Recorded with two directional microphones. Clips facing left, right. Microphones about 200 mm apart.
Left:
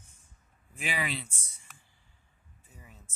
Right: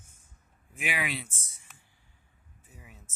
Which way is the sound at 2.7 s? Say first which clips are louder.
Right 1 dB; 5° right (ahead or behind).